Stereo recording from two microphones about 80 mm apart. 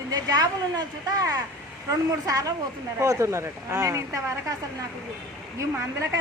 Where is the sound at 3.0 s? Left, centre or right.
Right.